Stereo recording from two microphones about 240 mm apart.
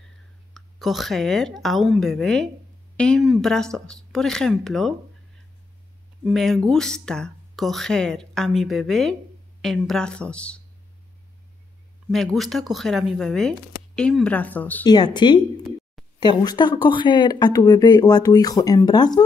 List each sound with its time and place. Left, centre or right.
0.6 s a woman's voice: centre
6.2 s a woman's voice: centre
12.1 s a woman's voice: centre